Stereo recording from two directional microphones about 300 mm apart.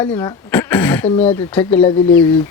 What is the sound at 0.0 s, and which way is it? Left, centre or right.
Speech, centre.